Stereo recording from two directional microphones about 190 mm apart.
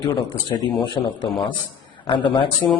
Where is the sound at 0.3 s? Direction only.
20° left (ahead or behind).